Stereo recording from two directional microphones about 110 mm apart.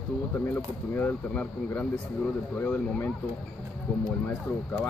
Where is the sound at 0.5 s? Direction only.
15° left (ahead or behind).